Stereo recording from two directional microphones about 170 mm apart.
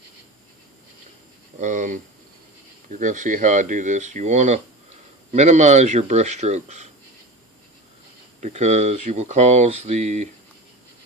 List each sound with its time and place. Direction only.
1.6 s speech: 45° right (ahead or behind)
8.4 s speech: 40° right (ahead or behind)